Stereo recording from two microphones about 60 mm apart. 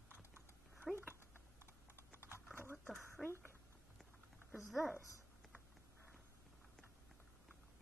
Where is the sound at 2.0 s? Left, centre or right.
Right.